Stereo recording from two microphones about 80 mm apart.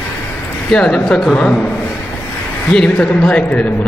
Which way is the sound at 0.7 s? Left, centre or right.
Centre.